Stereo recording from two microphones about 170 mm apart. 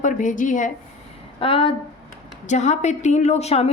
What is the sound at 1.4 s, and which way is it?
A woman's voice, 30° left (ahead or behind).